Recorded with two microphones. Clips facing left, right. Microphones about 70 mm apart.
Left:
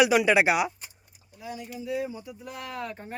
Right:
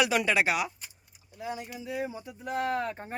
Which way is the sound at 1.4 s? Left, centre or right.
Right.